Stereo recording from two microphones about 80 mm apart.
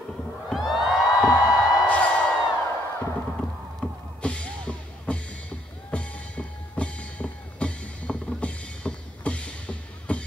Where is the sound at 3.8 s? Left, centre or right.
Centre.